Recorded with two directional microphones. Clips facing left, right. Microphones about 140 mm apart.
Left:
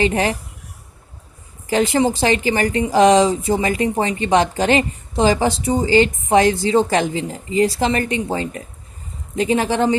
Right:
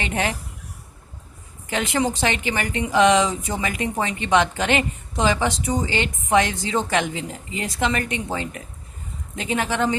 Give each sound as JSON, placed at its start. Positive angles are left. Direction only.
{"t": 0.0, "sound": "a woman's voice", "side_deg": 30}
{"t": 1.6, "sound": "a woman's voice", "side_deg": 35}